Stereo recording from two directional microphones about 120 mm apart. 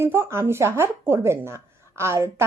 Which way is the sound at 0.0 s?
20° right (ahead or behind).